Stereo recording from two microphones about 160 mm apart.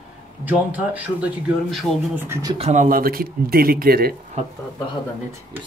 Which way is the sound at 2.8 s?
65° right (ahead or behind).